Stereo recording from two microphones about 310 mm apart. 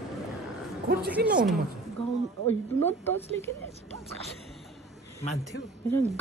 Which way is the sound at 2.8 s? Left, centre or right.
Centre.